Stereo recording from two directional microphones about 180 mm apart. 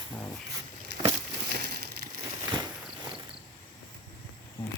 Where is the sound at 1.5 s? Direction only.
60° right (ahead or behind).